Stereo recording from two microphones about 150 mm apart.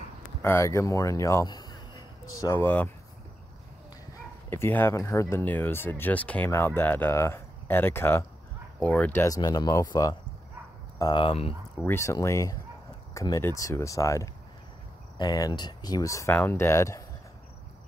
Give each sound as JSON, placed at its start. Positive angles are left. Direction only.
{"t": 0.4, "sound": "speech", "side_deg": 20}
{"t": 2.6, "sound": "speech", "side_deg": 10}
{"t": 4.5, "sound": "speech", "side_deg": 15}
{"t": 11.8, "sound": "speech", "side_deg": 15}